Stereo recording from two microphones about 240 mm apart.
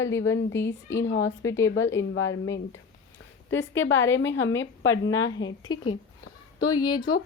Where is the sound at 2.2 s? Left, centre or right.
Left.